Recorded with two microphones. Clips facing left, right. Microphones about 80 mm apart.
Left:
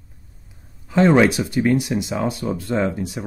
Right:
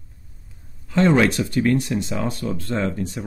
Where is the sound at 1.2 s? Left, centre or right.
Centre.